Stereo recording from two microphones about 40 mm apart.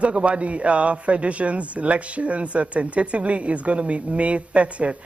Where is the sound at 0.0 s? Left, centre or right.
Right.